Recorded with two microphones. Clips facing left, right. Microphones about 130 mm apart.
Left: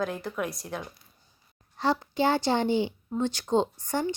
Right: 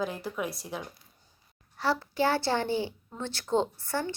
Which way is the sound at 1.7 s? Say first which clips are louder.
Left 2 dB; 20° left (ahead or behind).